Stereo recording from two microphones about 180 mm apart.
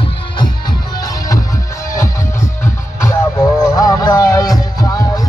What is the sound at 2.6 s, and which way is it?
Music, 15° left (ahead or behind).